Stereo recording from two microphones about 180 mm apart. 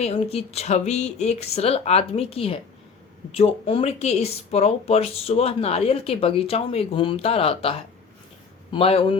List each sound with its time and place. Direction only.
0.0 s speech: 35° left (ahead or behind)